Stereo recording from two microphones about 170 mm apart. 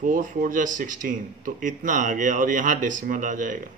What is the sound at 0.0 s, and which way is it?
Speech, 50° right (ahead or behind).